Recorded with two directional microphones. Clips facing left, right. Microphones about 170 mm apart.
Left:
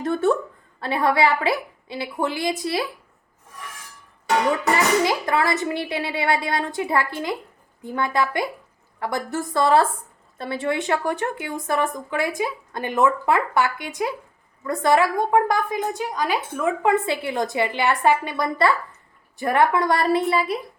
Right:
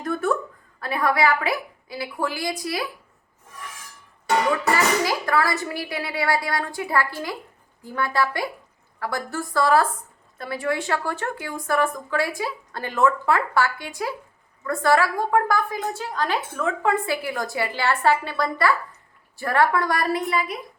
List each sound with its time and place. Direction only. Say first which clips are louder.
0.0 s a woman's voice: left 3 dB; 25° left (ahead or behind)
4.6 s a woman's voice: left 2 dB; 20° left (ahead or behind)